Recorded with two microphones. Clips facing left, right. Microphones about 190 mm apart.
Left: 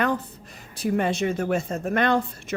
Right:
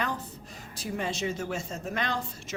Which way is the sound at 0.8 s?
60° left (ahead or behind).